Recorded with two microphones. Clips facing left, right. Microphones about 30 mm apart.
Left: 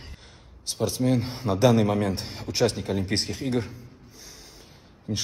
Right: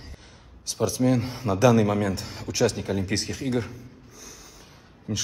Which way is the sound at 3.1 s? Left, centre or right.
Left.